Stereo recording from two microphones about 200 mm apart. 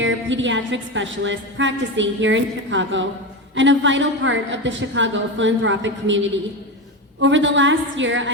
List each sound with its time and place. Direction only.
0.0 s a woman's voice: 70° right (ahead or behind)